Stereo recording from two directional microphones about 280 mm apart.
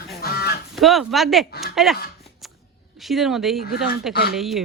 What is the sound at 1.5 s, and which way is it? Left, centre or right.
Speech, left.